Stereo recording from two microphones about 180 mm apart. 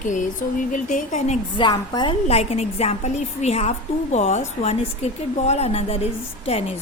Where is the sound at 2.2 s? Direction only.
35° left (ahead or behind).